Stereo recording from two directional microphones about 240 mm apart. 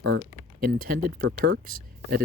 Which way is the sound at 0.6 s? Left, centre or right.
Right.